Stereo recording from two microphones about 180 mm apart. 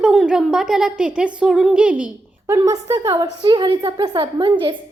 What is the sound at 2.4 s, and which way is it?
A woman's voice, 15° right (ahead or behind).